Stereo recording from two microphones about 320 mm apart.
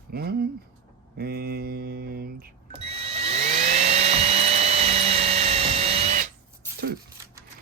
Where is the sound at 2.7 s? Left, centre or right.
Centre.